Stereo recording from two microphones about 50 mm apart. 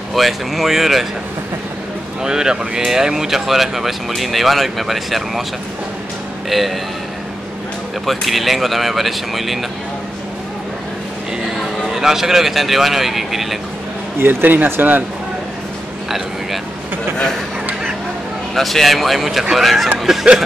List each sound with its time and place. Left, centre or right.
0.1 s speech: centre
2.2 s speech: centre
6.5 s speech: centre
8.0 s speech: centre
11.9 s speech: centre
14.2 s speech: right
18.5 s speech: centre